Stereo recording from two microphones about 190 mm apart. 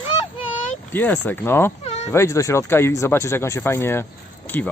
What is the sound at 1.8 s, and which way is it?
Cat, 35° left (ahead or behind).